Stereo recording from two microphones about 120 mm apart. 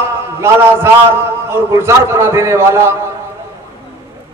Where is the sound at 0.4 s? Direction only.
20° right (ahead or behind).